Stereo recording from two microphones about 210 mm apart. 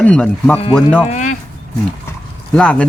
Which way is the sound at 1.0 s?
35° left (ahead or behind).